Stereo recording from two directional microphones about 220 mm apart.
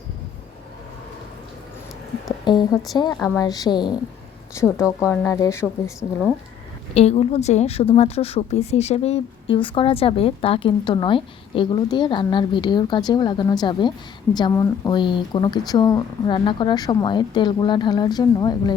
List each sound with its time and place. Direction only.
2.4 s a sound: 20° left (ahead or behind)
3.2 s a woman's voice: 15° left (ahead or behind)
6.9 s a woman's voice: 30° left (ahead or behind)